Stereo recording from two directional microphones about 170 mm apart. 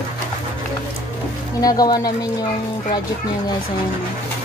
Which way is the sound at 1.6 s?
20° left (ahead or behind).